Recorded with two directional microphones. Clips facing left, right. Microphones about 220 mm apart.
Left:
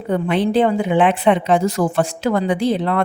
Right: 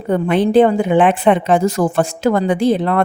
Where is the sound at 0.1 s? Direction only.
50° right (ahead or behind).